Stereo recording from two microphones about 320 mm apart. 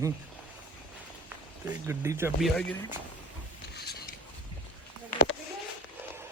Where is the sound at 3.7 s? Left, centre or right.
Left.